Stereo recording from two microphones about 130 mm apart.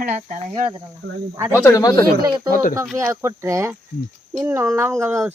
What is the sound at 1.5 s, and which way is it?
Speech, 20° left (ahead or behind).